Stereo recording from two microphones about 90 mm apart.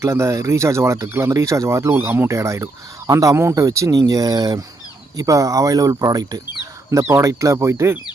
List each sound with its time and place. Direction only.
0.0 s speech: 30° right (ahead or behind)
6.9 s speech: 35° right (ahead or behind)